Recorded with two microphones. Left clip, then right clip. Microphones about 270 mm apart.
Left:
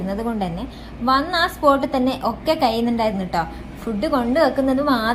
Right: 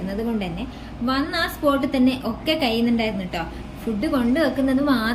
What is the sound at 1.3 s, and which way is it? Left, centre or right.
A woman's voice, centre.